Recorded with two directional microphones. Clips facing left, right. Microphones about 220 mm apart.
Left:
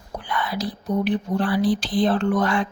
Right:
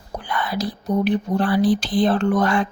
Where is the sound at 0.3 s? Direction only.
45° right (ahead or behind).